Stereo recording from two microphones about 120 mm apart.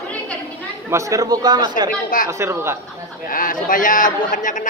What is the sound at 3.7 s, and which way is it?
Speech, 90° left.